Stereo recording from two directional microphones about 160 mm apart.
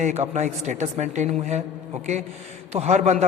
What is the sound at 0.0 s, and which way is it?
A man's voice, 45° right (ahead or behind).